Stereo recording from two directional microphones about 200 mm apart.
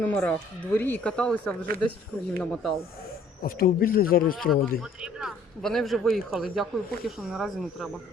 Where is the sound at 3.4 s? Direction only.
45° left (ahead or behind).